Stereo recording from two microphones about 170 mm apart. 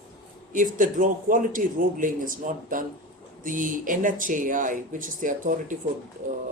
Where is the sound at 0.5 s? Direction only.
50° right (ahead or behind).